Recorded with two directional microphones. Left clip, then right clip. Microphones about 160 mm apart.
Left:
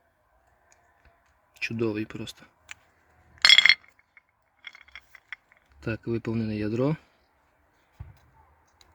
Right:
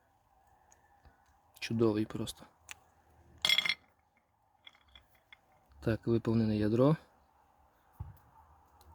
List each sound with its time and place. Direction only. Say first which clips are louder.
1.5 s speech: left 2 dB; centre (ahead or behind)
3.4 s chink: left 13 dB; 5° left (ahead or behind)
5.8 s speech: left 1 dB; centre (ahead or behind)